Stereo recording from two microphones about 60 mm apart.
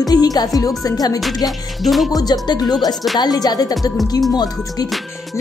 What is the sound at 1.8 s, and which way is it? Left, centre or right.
Music, centre.